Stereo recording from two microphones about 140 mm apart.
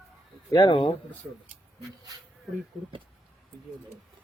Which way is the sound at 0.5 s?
35° left (ahead or behind).